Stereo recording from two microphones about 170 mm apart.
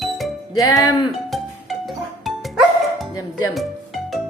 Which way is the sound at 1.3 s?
Centre (ahead or behind).